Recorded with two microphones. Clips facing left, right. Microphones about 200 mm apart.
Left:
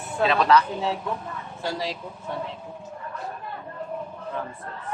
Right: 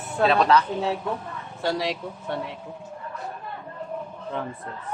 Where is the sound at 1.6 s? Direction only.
70° right (ahead or behind).